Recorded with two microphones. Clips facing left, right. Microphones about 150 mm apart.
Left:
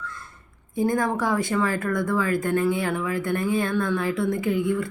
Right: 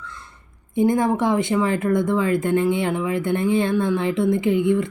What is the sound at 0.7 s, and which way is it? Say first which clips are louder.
Speech: right 5 dB; 20° right (ahead or behind).